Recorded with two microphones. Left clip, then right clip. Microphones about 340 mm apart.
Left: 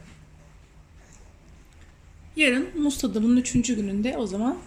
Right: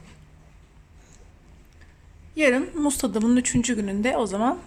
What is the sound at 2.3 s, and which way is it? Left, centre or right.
A woman's voice, centre.